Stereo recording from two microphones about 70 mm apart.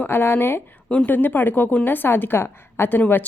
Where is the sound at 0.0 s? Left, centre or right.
Left.